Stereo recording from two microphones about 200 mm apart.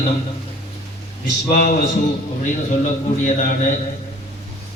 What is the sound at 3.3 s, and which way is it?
Speech, 40° left (ahead or behind).